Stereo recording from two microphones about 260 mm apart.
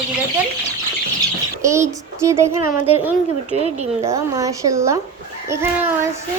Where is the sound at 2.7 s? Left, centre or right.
Left.